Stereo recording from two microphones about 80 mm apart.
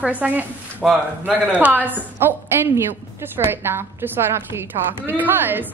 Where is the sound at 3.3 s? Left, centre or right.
Right.